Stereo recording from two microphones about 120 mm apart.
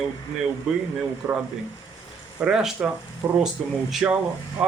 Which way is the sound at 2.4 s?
5° right (ahead or behind).